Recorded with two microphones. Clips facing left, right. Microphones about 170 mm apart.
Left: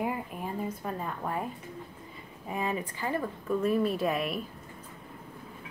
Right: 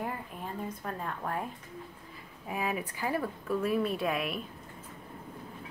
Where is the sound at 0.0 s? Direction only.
10° left (ahead or behind).